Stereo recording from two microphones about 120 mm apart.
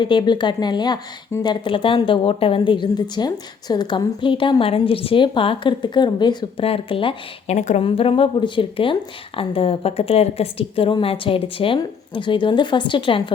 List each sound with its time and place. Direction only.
0.0 s a woman's voice: 40° left (ahead or behind)
6.7 s a woman's voice: 50° left (ahead or behind)
7.5 s a woman's voice: 75° left (ahead or behind)
7.8 s a woman's voice: 50° left (ahead or behind)